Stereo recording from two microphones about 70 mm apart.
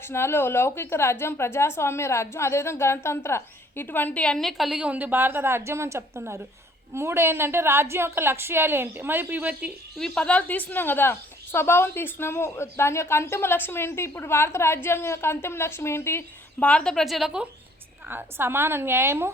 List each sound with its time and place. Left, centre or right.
0.1 s a woman's voice: left; by 4.4 s centre
4.4 s a woman's voice: centre
4.8 s a woman's voice: centre
10.0 s a woman's voice: centre; by 16.2 s left
16.6 s a woman's voice: centre
16.9 s a woman's voice: centre
18.1 s a woman's voice: right